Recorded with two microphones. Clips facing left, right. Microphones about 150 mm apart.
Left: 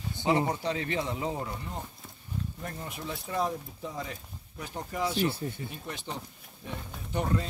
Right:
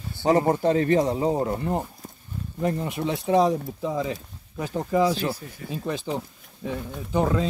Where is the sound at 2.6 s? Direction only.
85° right.